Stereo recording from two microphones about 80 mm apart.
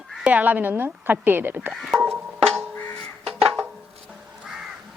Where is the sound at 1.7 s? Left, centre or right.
Centre.